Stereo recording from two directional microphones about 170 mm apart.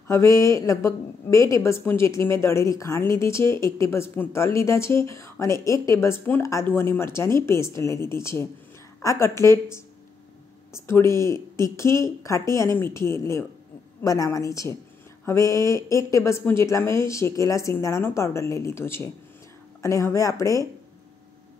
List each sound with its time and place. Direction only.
0.1 s a woman's voice: 15° left (ahead or behind)